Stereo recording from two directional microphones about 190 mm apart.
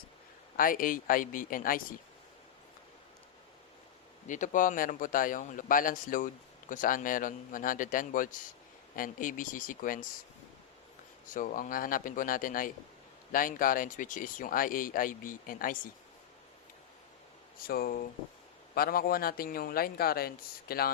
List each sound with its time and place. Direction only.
0.5 s speech: 50° left (ahead or behind)
4.3 s speech: 40° left (ahead or behind)
11.3 s speech: 45° left (ahead or behind)
17.7 s speech: 50° left (ahead or behind)